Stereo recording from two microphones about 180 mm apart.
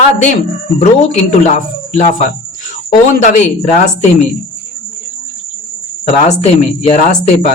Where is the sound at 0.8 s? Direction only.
40° left (ahead or behind).